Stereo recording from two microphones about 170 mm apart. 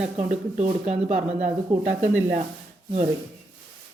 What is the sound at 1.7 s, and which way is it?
Speech, 5° right (ahead or behind).